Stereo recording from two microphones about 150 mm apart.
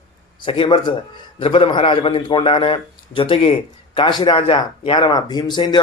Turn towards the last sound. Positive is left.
turn(degrees=30)  # may be behind; listen again after turning